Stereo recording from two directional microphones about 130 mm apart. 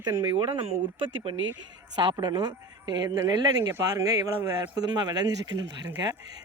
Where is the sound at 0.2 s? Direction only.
35° right (ahead or behind).